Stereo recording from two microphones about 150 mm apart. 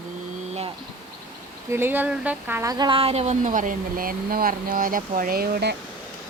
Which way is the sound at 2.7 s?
30° right (ahead or behind).